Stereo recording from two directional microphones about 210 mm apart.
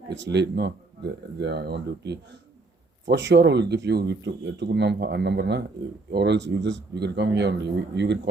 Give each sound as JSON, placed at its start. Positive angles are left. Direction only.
{"t": 0.2, "sound": "speech", "side_deg": -55}